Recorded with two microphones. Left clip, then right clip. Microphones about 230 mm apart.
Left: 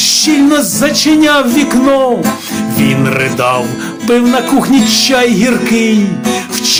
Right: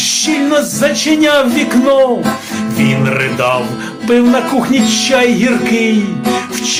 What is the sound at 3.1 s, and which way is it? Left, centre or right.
Music, left.